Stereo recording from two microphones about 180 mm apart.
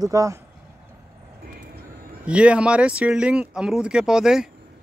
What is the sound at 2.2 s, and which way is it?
Speech, 5° right (ahead or behind).